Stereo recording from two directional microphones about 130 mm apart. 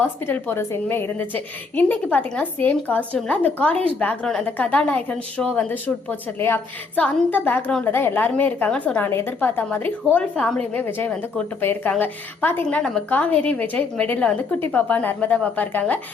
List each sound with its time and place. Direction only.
0.0 s a woman's voice: 15° left (ahead or behind)